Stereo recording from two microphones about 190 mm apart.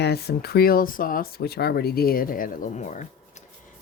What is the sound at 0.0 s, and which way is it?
Speech, 60° left (ahead or behind).